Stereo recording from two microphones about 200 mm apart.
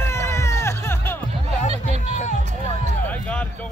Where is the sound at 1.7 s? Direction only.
30° right (ahead or behind).